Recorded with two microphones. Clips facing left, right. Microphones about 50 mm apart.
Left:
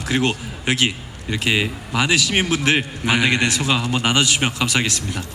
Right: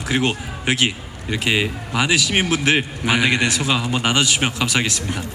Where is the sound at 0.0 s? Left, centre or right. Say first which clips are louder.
Even; centre.